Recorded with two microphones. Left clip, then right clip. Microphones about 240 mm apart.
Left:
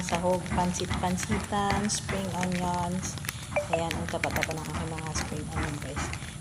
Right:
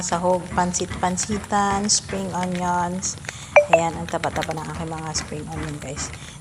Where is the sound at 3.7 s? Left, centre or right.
Centre.